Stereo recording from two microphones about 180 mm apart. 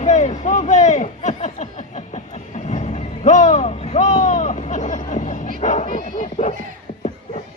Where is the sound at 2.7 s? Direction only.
40° left (ahead or behind).